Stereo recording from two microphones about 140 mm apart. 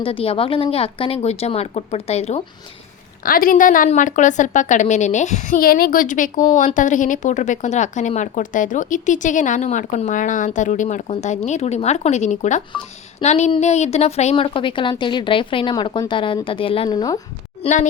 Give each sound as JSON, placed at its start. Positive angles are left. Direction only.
{"t": 0.0, "sound": "a woman's voice", "side_deg": 40}
{"t": 3.2, "sound": "a woman's voice", "side_deg": 90}
{"t": 3.8, "sound": "a woman's voice", "side_deg": 65}
{"t": 17.6, "sound": "speech", "side_deg": 55}